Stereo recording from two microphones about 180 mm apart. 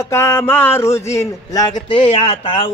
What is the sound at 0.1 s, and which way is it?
A man's voice, 15° left (ahead or behind).